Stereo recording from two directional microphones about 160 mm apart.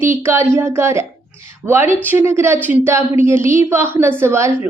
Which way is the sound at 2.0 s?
15° right (ahead or behind).